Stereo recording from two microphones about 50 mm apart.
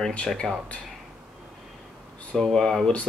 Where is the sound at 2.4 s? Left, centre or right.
Centre.